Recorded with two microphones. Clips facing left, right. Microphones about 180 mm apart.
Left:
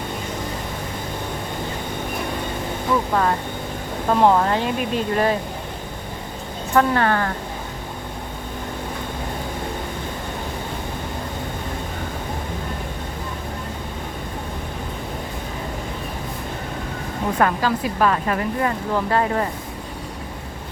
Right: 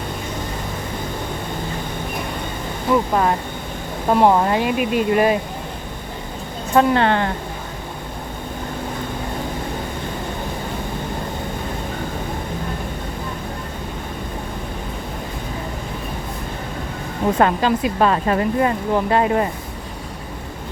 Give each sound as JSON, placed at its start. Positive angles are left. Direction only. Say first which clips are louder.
{"t": 4.1, "sound": "speech", "louder": "right 2 dB", "side_deg": -10}
{"t": 6.7, "sound": "speech", "louder": "right 2 dB", "side_deg": -25}
{"t": 17.3, "sound": "speech", "louder": "right 2 dB", "side_deg": -25}